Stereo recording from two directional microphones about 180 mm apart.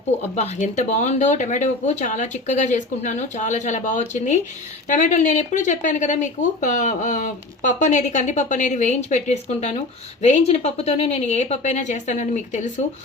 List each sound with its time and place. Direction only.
0.2 s speech: 40° left (ahead or behind)